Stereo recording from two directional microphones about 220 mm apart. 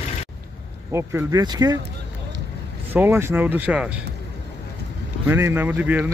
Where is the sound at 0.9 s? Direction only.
15° right (ahead or behind).